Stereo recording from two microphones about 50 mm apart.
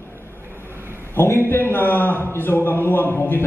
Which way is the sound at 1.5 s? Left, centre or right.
Left.